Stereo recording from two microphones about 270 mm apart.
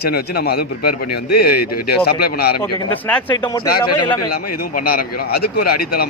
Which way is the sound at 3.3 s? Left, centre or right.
Centre.